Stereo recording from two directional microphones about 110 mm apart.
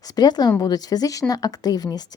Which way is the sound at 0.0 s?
35° left (ahead or behind).